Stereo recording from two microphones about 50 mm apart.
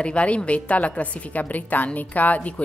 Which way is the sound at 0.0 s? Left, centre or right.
Left.